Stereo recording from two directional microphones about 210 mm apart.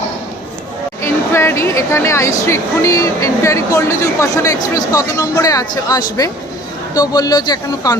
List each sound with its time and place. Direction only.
1.0 s speech: 10° left (ahead or behind)